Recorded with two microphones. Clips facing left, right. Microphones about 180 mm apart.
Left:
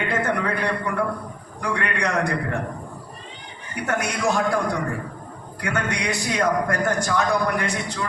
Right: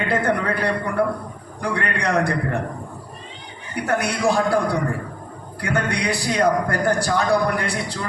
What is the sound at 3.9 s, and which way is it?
A man's voice, 35° right (ahead or behind).